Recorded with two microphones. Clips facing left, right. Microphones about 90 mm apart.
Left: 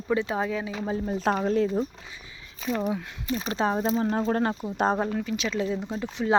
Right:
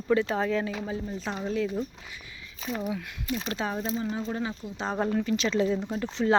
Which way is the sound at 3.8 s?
45° left (ahead or behind).